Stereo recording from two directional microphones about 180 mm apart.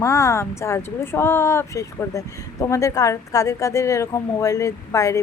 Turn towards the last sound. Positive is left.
turn(degrees=15)  # may be behind; listen again after turning